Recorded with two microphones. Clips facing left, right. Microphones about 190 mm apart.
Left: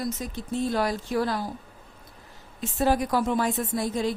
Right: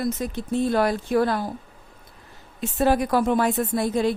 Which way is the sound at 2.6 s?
60° right (ahead or behind).